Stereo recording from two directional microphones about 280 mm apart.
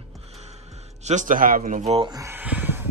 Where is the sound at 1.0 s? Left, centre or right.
Right; by 2.9 s centre.